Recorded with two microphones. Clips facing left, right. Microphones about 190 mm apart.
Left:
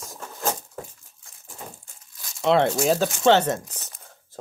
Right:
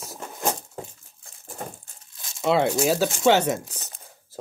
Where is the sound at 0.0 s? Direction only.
10° right (ahead or behind).